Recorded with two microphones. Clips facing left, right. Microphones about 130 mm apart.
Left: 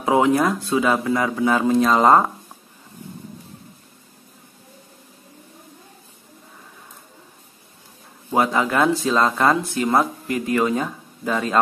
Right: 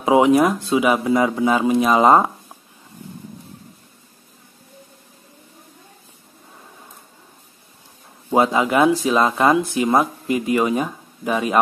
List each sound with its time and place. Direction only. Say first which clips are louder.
0.0 s speech: right 3 dB; 20° right (ahead or behind)
8.3 s speech: right 3 dB; 15° right (ahead or behind)